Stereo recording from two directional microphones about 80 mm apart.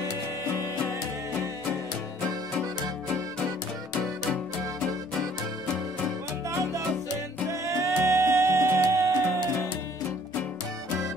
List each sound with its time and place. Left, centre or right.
7.4 s music: right